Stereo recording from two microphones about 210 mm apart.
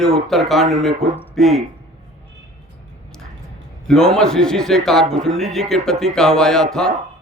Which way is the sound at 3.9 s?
5° left (ahead or behind).